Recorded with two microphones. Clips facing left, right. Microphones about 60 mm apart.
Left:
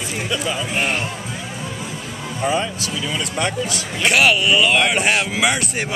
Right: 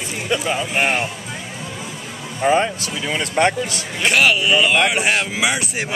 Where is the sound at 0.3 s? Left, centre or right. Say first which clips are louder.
Right 4 dB; right.